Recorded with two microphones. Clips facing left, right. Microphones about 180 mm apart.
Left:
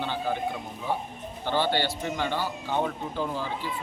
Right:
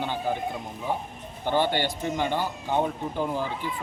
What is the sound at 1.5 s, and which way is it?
Speech, 15° right (ahead or behind).